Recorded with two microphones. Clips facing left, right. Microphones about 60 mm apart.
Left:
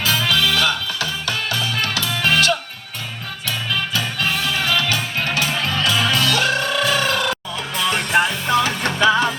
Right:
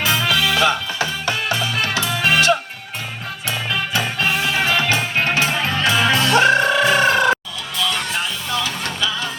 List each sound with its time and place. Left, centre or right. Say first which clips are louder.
0.0 s music: right 1 dB; centre
3.7 s music: right 2 dB; right
7.8 s music: left 5 dB; left